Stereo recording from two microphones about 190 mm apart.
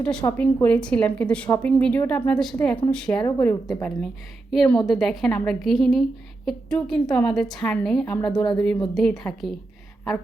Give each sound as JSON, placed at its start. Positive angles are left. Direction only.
{"t": 0.0, "sound": "a woman's voice", "side_deg": 5}
{"t": 3.2, "sound": "a woman's voice", "side_deg": 15}
{"t": 3.7, "sound": "a woman's voice", "side_deg": 5}